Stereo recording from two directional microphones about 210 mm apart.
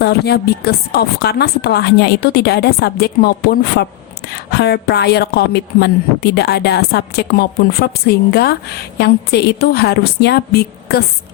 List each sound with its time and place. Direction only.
0.0 s a woman's voice: 50° left (ahead or behind)